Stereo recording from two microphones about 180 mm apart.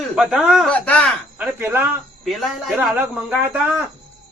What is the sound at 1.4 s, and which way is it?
A man's voice, 10° right (ahead or behind).